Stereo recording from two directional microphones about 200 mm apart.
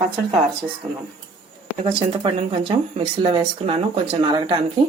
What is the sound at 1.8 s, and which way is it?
Speech, 25° right (ahead or behind).